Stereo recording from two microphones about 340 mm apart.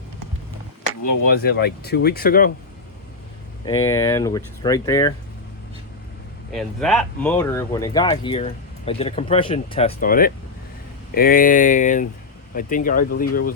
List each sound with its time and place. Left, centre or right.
1.3 s speech: left
3.7 s speech: centre
6.5 s speech: centre; by 13.5 s left